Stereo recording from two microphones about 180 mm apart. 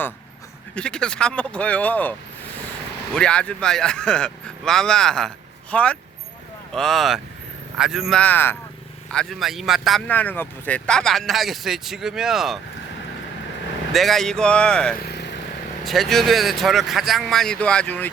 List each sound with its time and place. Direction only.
0.8 s speech: 5° left (ahead or behind)
3.2 s speech: 5° left (ahead or behind)
13.9 s speech: centre (ahead or behind)
15.0 s vehicle: 65° left (ahead or behind)
15.8 s speech: centre (ahead or behind)